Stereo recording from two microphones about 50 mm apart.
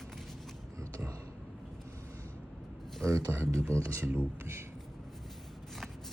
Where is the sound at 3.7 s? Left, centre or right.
Right.